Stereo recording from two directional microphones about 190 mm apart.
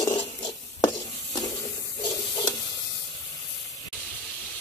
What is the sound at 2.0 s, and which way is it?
Stir, 20° left (ahead or behind).